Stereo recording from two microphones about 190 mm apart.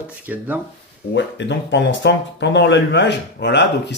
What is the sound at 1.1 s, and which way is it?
Speech, 70° left (ahead or behind).